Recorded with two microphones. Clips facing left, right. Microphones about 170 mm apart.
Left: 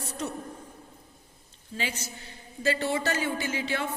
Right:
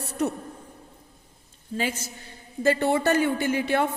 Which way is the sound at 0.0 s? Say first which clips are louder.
Right 8 dB; 60° right (ahead or behind).